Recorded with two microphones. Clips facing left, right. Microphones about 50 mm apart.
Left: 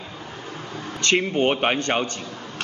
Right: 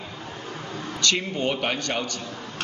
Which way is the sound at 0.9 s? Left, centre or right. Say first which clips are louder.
Left 5 dB; left.